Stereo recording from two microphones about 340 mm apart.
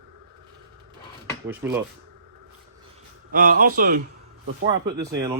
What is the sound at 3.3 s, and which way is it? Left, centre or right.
Speech, right.